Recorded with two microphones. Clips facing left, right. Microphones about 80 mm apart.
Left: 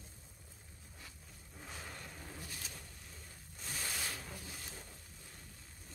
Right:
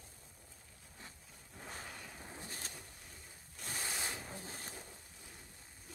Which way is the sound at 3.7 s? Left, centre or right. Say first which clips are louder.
Right 1 dB; right.